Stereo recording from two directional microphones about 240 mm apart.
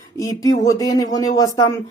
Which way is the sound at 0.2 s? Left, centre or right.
Centre.